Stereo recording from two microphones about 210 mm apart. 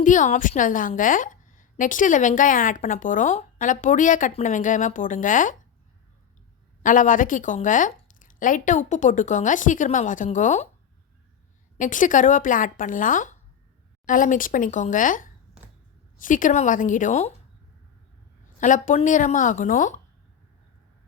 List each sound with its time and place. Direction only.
0.0 s a woman's voice: 35° left (ahead or behind)
6.8 s a woman's voice: 40° left (ahead or behind)
11.8 s a woman's voice: 40° left (ahead or behind)
18.6 s a woman's voice: 35° left (ahead or behind)